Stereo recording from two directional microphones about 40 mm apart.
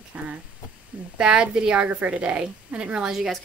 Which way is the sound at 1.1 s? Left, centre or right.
Right.